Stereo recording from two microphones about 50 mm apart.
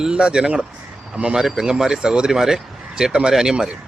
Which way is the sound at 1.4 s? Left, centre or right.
Centre.